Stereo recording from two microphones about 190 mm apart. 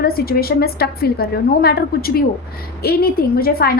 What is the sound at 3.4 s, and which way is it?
Speech, 55° left (ahead or behind).